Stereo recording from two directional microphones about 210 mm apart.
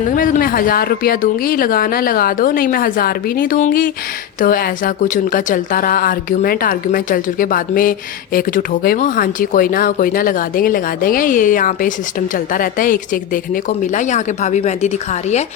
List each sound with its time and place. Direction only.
0.1 s a woman's voice: 40° left (ahead or behind)